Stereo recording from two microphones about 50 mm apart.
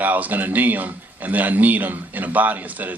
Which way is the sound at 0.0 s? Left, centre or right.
Right.